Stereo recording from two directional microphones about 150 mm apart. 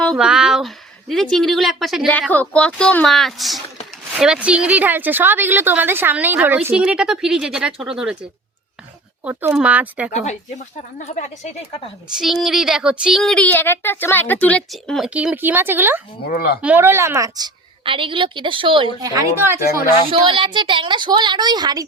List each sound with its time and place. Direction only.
0.2 s a woman's voice: 5° right (ahead or behind)
9.2 s speech: 15° right (ahead or behind)
10.1 s a woman's voice: 50° left (ahead or behind)
12.1 s speech: centre (ahead or behind)
16.2 s speech: 90° left
16.6 s a woman's voice: 10° right (ahead or behind); by 18.9 s 35° right (ahead or behind)
19.4 s speech: 15° right (ahead or behind)
20.1 s a woman's voice: 35° right (ahead or behind)